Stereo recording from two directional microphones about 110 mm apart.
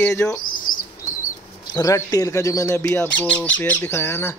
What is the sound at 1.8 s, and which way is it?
Speech, 35° left (ahead or behind).